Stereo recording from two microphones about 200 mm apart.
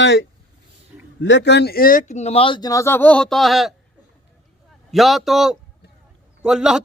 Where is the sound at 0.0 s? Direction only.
60° left (ahead or behind); by 3.8 s centre (ahead or behind).